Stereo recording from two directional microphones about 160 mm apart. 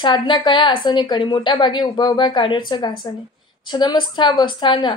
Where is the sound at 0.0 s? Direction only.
30° left (ahead or behind).